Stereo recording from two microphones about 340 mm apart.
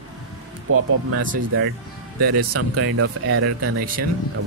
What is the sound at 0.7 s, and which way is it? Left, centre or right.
Speech, right.